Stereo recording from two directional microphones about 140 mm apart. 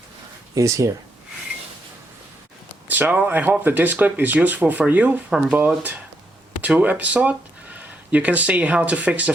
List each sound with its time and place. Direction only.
0.5 s speech: 20° right (ahead or behind)
2.9 s speech: 10° right (ahead or behind)